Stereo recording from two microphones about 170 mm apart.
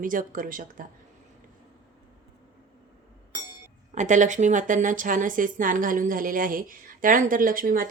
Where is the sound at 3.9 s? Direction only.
45° right (ahead or behind).